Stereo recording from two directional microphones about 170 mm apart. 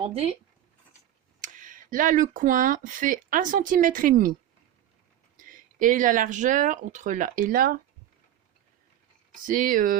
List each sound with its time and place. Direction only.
0.0 s speech: 35° right (ahead or behind)
1.4 s speech: 50° right (ahead or behind)
5.4 s speech: 50° right (ahead or behind)
9.3 s speech: 55° right (ahead or behind)